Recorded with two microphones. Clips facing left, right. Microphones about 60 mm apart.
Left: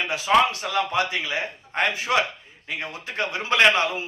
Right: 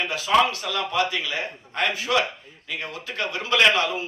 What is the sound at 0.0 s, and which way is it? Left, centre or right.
A man's voice, left.